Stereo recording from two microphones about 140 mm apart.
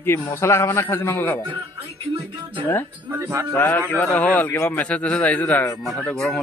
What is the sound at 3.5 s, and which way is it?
A man's voice, 15° left (ahead or behind).